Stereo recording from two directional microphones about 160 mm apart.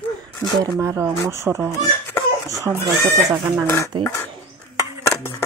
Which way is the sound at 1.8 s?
20° left (ahead or behind).